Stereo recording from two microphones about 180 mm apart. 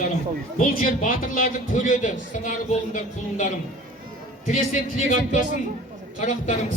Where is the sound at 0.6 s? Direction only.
50° left (ahead or behind).